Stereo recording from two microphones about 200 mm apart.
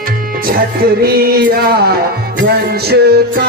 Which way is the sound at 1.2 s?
50° right (ahead or behind).